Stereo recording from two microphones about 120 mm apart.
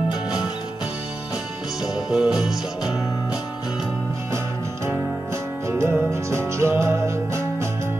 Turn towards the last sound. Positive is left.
turn(degrees=-20)  # may be behind; listen again after turning